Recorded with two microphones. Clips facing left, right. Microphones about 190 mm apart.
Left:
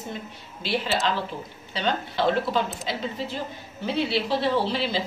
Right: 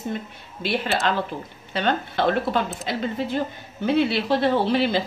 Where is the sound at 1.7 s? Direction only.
55° right (ahead or behind).